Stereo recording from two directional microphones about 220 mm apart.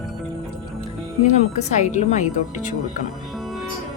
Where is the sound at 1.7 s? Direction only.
35° left (ahead or behind).